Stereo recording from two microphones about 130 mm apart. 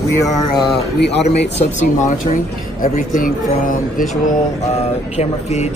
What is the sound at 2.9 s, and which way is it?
Speech, 90° left.